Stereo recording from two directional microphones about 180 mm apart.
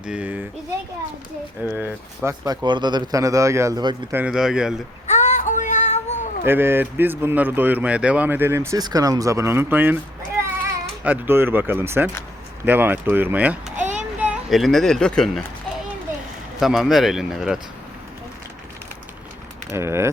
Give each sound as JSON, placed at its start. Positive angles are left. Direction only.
{"t": 0.0, "sound": "speech", "side_deg": -5}
{"t": 1.6, "sound": "speech", "side_deg": -10}
{"t": 4.1, "sound": "speech", "side_deg": -5}
{"t": 5.0, "sound": "child singing", "side_deg": 40}
{"t": 6.4, "sound": "speech", "side_deg": -10}
{"t": 16.6, "sound": "speech", "side_deg": 0}
{"t": 19.7, "sound": "speech", "side_deg": -15}